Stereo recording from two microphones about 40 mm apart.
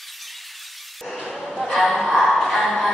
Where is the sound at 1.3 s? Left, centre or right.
Centre.